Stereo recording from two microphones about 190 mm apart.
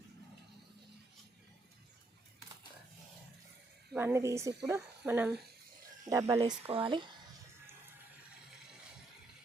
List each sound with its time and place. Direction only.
3.9 s speech: 15° right (ahead or behind)
6.4 s speech: 25° right (ahead or behind)